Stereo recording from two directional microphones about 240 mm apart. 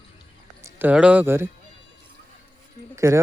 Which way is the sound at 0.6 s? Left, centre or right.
Centre.